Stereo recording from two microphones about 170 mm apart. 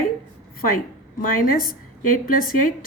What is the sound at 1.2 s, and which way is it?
Speech, 55° left (ahead or behind).